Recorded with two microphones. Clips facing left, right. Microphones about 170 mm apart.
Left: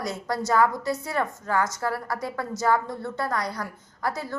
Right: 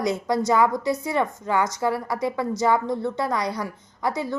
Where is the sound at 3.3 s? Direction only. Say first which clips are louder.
Right 3 dB; 20° right (ahead or behind).